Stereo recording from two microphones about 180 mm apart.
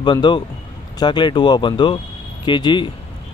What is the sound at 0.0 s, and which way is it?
Speech, 25° left (ahead or behind).